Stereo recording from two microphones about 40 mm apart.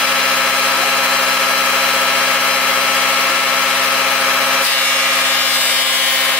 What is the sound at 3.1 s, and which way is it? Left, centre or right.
Vehicle, centre.